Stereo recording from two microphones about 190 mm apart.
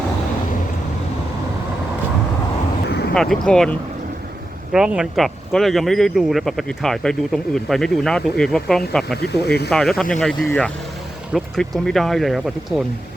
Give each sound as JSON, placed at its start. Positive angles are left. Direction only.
{"t": 3.2, "sound": "speech", "side_deg": 5}
{"t": 9.2, "sound": "speech", "side_deg": 60}
{"t": 9.6, "sound": "speech", "side_deg": 0}